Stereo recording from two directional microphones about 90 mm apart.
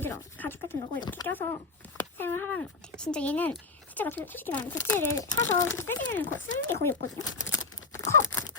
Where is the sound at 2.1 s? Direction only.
25° left (ahead or behind).